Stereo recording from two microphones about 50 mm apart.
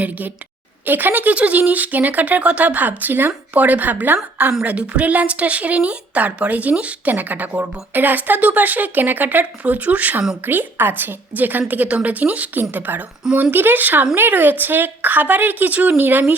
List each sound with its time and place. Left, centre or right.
0.0 s speech: right
3.0 s speech: right
4.6 s a woman's voice: right